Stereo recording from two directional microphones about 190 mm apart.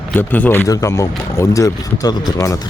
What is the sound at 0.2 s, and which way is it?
Speech, 10° left (ahead or behind).